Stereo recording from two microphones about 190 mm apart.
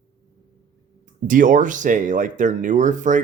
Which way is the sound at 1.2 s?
45° right (ahead or behind).